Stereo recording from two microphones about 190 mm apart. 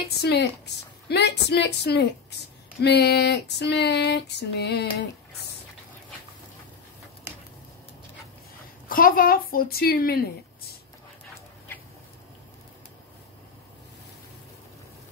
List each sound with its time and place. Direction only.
0.2 s female singing: 60° left (ahead or behind)
8.8 s a woman's voice: 50° left (ahead or behind)